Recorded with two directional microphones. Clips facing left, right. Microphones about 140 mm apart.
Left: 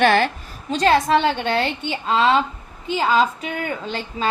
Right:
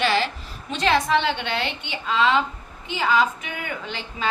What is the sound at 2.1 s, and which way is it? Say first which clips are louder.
A woman's voice: left 3 dB; 30° left (ahead or behind).